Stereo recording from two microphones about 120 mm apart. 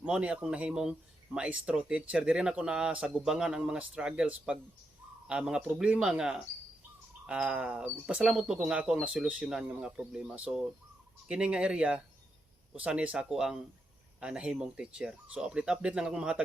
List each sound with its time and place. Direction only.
0.0 s speech: 10° right (ahead or behind)